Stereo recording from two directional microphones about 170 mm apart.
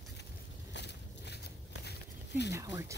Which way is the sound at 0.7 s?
85° left.